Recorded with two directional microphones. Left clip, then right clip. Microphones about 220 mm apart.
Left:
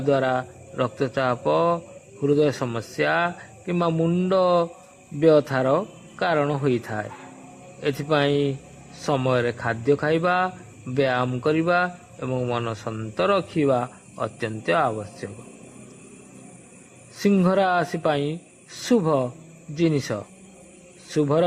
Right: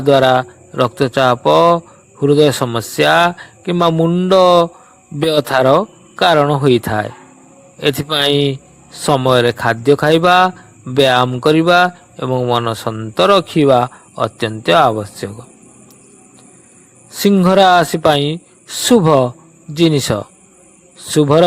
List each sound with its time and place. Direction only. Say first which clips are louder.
0.0 s a man's voice: right 11 dB; 30° right (ahead or behind)
17.2 s a man's voice: right 10 dB; 30° right (ahead or behind)